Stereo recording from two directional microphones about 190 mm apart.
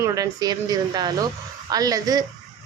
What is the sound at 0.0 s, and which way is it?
Speech, 20° right (ahead or behind).